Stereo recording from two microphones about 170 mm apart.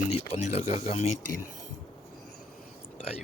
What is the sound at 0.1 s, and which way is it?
Speech, 40° left (ahead or behind).